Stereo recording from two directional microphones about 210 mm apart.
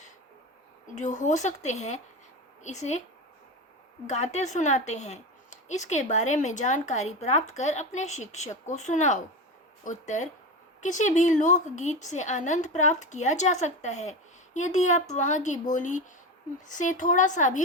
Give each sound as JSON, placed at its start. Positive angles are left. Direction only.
{"t": 0.9, "sound": "a woman's voice", "side_deg": 35}
{"t": 4.0, "sound": "a woman's voice", "side_deg": 35}